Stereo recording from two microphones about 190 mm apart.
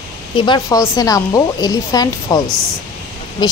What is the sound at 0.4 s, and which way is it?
A woman's voice, 20° left (ahead or behind).